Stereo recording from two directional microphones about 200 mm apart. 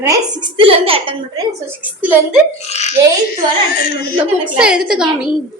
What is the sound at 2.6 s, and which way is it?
Speech, 35° left (ahead or behind).